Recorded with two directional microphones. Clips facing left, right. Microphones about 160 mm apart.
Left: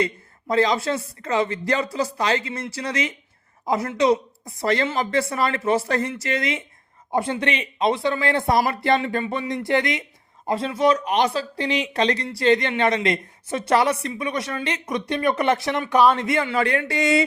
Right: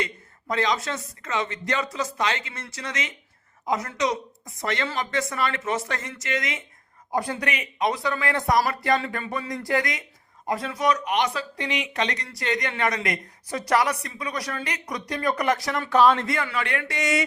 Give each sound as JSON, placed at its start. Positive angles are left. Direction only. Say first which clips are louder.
{"t": 0.0, "sound": "speech", "louder": "left 6 dB", "side_deg": 30}
{"t": 16.3, "sound": "speech", "louder": "left 6 dB", "side_deg": 25}